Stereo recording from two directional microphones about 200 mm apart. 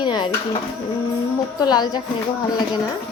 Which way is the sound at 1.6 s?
20° left (ahead or behind).